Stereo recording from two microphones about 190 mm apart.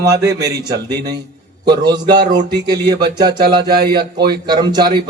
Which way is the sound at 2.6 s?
20° right (ahead or behind).